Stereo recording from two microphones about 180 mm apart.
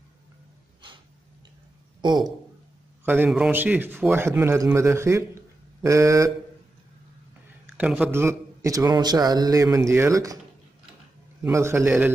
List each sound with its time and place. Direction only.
3.1 s a man's voice: 10° right (ahead or behind)
7.7 s a man's voice: 10° right (ahead or behind)
11.4 s a man's voice: 15° right (ahead or behind)